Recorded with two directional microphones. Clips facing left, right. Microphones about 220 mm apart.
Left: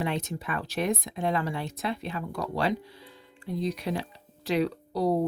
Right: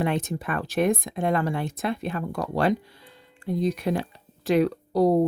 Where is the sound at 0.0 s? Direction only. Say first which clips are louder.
Right 5 dB; 50° right (ahead or behind).